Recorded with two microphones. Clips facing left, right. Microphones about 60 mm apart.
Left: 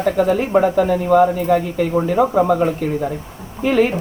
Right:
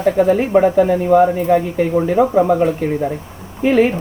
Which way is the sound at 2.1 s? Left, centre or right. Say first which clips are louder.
Right 2 dB; centre.